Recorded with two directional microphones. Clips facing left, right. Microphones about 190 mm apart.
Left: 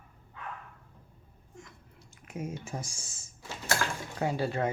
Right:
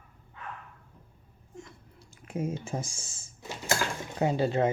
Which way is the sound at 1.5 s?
30° right (ahead or behind).